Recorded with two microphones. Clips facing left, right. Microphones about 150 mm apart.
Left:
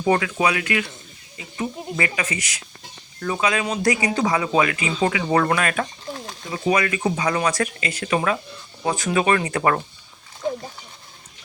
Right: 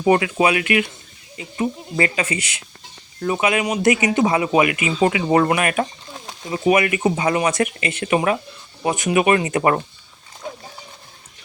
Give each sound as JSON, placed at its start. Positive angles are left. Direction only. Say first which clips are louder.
{"t": 0.0, "sound": "speech", "louder": "right 3 dB", "side_deg": -20}